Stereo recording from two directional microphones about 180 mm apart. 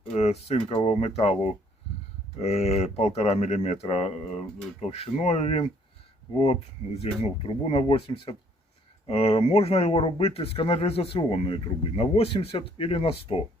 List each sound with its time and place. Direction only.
0.1 s speech: 35° left (ahead or behind)